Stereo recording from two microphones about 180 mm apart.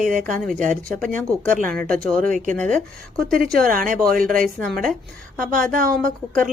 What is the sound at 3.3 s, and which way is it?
A woman's voice, 50° right (ahead or behind).